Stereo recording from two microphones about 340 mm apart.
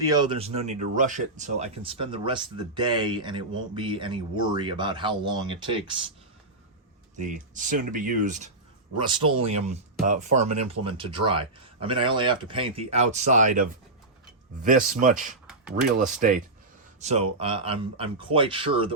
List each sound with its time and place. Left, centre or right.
0.1 s speech: centre
7.2 s speech: right